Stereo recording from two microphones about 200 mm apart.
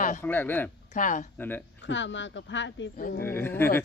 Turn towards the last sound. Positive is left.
turn(degrees=10)  # may be behind; listen again after turning